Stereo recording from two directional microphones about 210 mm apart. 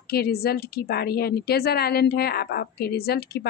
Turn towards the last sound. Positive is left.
turn(degrees=50)  # may be behind; listen again after turning